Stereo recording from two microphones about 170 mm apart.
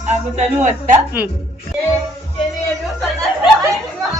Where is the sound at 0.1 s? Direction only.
45° right (ahead or behind).